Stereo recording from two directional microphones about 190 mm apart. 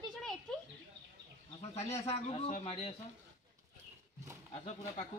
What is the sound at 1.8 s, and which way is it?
Speech, 35° left (ahead or behind).